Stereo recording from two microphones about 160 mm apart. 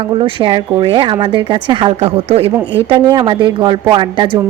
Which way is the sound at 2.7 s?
30° right (ahead or behind).